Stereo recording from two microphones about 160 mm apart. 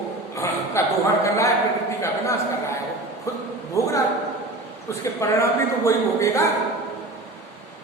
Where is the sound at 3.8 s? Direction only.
20° left (ahead or behind).